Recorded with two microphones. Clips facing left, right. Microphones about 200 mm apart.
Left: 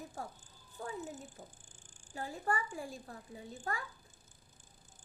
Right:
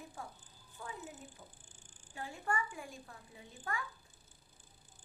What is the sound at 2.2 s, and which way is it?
A woman's voice, 40° left (ahead or behind).